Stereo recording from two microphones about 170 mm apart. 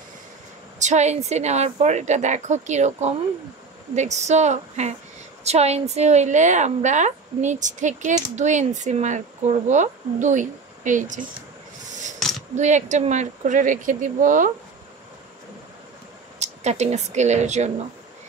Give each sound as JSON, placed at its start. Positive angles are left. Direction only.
{"t": 0.7, "sound": "a woman's voice", "side_deg": -45}
{"t": 11.9, "sound": "wild animals", "side_deg": -45}
{"t": 12.2, "sound": "a sound", "side_deg": 0}
{"t": 12.5, "sound": "a woman's voice", "side_deg": -45}
{"t": 16.3, "sound": "speech", "side_deg": -40}